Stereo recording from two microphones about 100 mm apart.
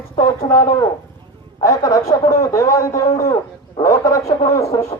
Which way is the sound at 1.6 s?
35° left (ahead or behind).